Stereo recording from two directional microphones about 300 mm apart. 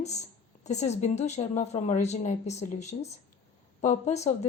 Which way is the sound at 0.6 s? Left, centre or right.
Left.